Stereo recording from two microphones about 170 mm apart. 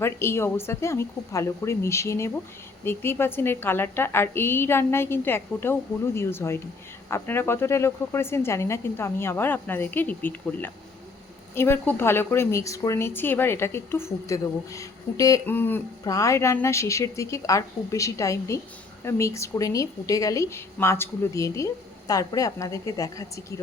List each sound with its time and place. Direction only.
0.0 s a woman's voice: 15° left (ahead or behind)